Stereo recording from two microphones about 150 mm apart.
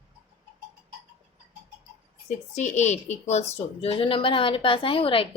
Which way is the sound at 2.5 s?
50° left (ahead or behind).